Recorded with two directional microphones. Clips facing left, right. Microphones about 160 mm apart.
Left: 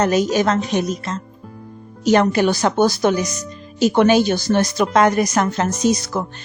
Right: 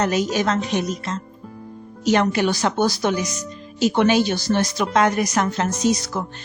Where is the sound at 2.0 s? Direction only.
45° left (ahead or behind).